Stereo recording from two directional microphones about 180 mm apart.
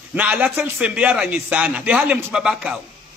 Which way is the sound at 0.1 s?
10° right (ahead or behind).